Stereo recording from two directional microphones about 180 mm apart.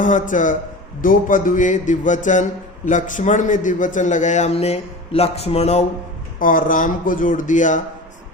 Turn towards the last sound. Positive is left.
turn(degrees=45)  # may be behind; listen again after turning